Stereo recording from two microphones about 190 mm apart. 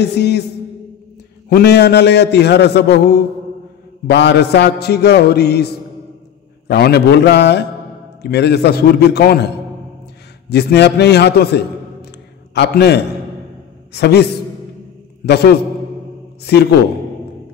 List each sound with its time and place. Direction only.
0.0 s a man's voice: 60° left (ahead or behind)
1.5 s a man's voice: 60° left (ahead or behind)
6.7 s a man's voice: 60° left (ahead or behind)
10.5 s a man's voice: 60° left (ahead or behind)
15.2 s a man's voice: 60° left (ahead or behind)